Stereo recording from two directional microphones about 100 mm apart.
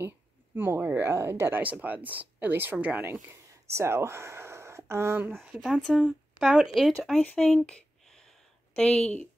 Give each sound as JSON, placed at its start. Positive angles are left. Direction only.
{"t": 0.6, "sound": "speech", "side_deg": -20}
{"t": 5.9, "sound": "a woman's voice", "side_deg": 5}
{"t": 6.4, "sound": "speech", "side_deg": -10}
{"t": 6.7, "sound": "speech", "side_deg": 5}